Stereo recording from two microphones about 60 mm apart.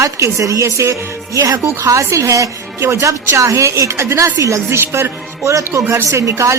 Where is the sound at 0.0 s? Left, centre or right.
Right.